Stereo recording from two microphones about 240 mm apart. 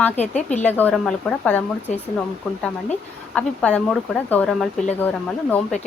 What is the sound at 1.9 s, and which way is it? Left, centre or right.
Speech, left.